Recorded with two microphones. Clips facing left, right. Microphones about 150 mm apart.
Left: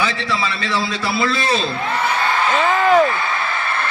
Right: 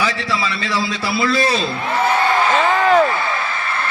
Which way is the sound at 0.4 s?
30° left (ahead or behind).